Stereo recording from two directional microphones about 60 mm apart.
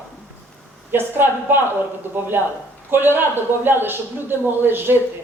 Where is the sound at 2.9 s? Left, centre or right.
Right.